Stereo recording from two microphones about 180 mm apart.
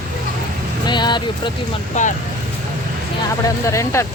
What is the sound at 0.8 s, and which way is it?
Speech, 25° left (ahead or behind).